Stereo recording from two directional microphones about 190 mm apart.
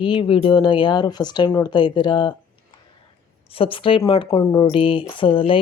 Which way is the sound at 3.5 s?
30° left (ahead or behind).